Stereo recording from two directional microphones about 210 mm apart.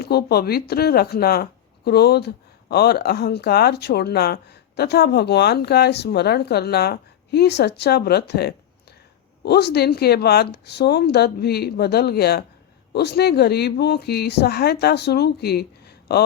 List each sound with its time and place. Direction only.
0.0 s speech: 50° left (ahead or behind)